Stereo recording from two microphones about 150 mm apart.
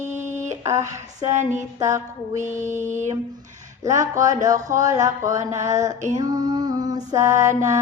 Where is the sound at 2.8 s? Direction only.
55° right (ahead or behind).